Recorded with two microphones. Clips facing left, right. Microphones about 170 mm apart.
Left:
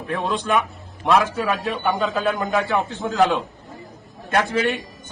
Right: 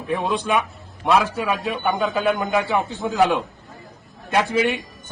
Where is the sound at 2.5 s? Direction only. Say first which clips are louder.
Even; 20° right (ahead or behind).